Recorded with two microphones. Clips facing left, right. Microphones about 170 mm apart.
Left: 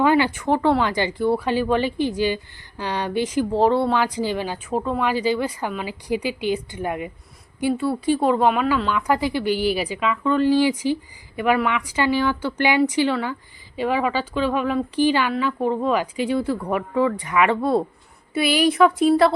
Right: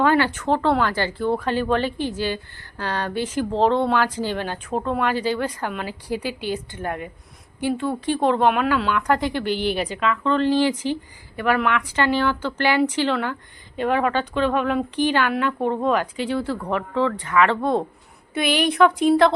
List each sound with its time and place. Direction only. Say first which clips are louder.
0.0 s speech: left 1 dB; 15° left (ahead or behind)